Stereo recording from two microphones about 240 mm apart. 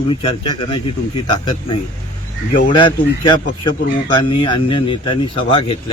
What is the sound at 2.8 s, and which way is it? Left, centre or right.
Speech, centre.